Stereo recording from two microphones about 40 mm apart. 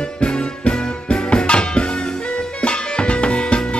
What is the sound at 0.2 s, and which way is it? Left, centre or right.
Music, left.